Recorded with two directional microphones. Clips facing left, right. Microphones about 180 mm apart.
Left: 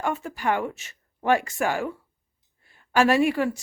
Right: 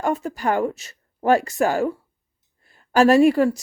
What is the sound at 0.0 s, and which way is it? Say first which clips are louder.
A woman's voice: right 4 dB; 40° right (ahead or behind).